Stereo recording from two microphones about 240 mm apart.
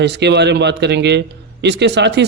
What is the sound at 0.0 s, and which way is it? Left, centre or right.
Speech, right.